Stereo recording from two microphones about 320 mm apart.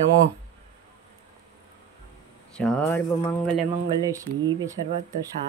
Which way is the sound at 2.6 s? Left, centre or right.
Centre.